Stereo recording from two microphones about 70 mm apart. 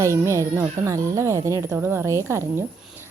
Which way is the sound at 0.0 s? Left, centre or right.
Right.